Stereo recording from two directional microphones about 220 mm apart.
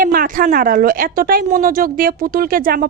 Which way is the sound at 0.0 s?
40° right (ahead or behind).